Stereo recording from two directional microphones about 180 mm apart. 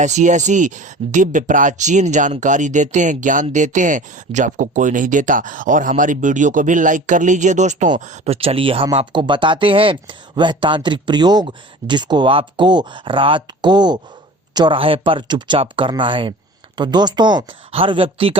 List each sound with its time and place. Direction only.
0.0 s speech: 40° right (ahead or behind)